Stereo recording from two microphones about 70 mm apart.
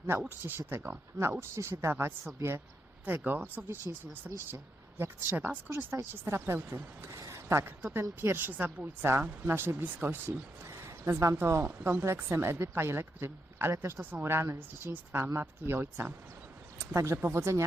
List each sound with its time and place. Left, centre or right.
0.2 s a woman's voice: right
8.2 s a woman's voice: right